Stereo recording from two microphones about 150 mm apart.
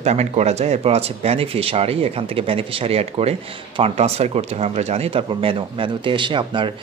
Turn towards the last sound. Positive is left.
turn(degrees=-30)  # may be behind; listen again after turning